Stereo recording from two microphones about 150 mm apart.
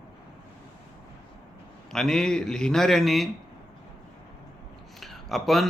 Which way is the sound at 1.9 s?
5° left (ahead or behind).